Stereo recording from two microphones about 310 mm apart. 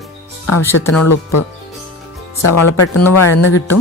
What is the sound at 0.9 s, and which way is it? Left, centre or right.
Speech, left.